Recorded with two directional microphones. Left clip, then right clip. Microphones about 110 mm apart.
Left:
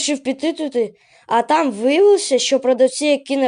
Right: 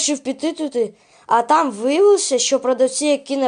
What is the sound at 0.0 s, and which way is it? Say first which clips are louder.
Speech: left 1 dB; 15° left (ahead or behind).